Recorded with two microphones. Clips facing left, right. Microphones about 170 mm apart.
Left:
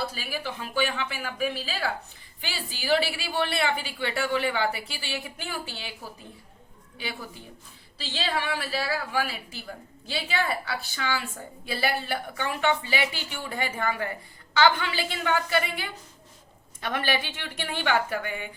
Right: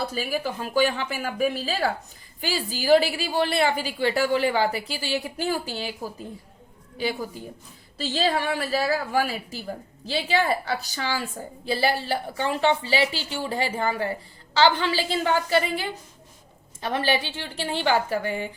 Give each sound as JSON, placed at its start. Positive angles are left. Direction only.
{"t": 0.0, "sound": "a woman's voice", "side_deg": -45}